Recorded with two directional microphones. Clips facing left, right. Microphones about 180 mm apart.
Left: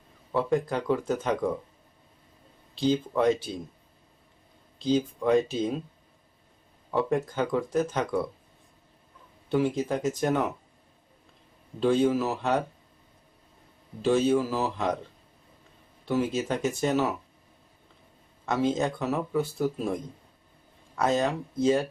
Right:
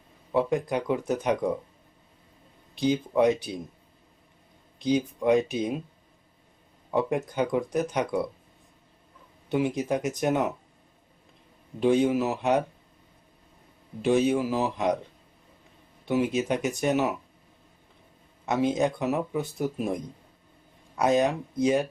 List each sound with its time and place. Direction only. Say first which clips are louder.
0.3 s speech: right 1 dB; 15° right (ahead or behind)
2.7 s speech: right 1 dB; 15° right (ahead or behind)
4.8 s speech: even; 15° right (ahead or behind)
6.9 s speech: even; 15° right (ahead or behind)
9.5 s speech: even; 15° right (ahead or behind)
11.8 s speech: right 1 dB; 15° right (ahead or behind)
14.0 s speech: even; 15° right (ahead or behind)
16.0 s speech: right 2 dB; 15° right (ahead or behind)
18.4 s speech: right 1 dB; 15° right (ahead or behind)